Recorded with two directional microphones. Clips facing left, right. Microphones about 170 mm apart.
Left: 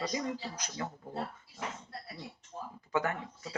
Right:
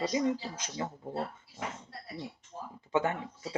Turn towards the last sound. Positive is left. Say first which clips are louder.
# right 3 dB
turn(degrees=-25)  # may be behind; listen again after turning